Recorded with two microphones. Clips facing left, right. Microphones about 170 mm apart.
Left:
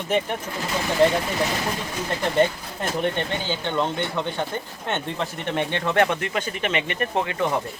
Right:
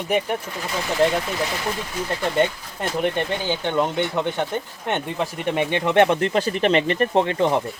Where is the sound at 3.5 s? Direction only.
15° right (ahead or behind).